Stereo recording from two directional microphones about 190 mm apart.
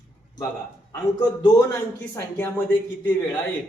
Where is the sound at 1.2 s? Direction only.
20° left (ahead or behind).